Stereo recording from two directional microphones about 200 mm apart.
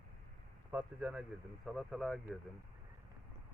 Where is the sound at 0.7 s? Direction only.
5° right (ahead or behind).